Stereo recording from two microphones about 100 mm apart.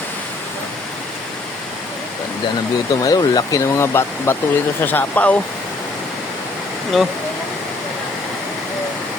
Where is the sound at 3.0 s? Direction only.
40° left (ahead or behind); by 5.4 s 15° left (ahead or behind).